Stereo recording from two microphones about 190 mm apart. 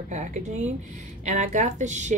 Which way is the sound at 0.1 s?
40° right (ahead or behind).